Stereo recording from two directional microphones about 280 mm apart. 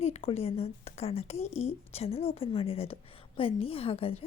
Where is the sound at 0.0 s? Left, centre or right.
Left.